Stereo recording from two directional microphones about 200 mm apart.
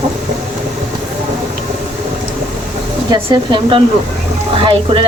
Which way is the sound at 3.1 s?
25° right (ahead or behind).